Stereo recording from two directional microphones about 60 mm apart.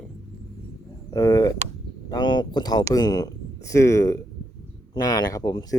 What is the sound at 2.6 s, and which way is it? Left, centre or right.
Speech, left.